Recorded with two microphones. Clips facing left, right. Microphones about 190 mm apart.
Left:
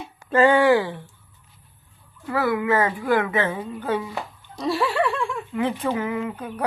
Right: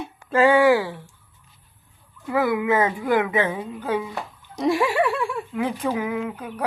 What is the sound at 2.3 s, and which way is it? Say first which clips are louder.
Speech: right 1 dB; 15° right (ahead or behind).